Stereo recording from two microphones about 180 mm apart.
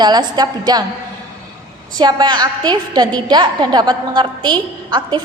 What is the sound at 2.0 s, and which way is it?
A woman's voice, 25° right (ahead or behind).